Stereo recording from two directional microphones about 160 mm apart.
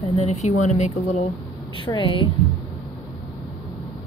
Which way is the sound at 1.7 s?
30° left (ahead or behind).